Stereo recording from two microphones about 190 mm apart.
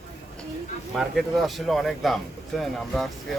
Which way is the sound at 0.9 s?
Centre (ahead or behind).